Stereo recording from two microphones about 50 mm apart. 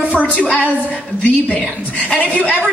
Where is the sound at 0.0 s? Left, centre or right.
Right.